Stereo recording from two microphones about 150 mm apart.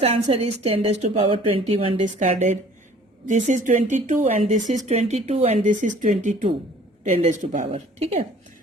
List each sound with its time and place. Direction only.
0.0 s a woman's voice: 40° right (ahead or behind)
2.0 s a woman's voice: 55° right (ahead or behind)